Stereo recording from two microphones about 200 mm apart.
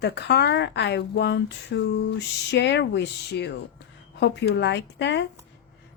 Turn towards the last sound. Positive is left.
turn(degrees=60)  # may be behind; listen again after turning